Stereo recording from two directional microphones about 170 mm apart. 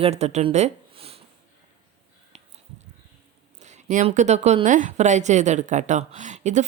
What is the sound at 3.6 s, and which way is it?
A woman's voice, 45° right (ahead or behind).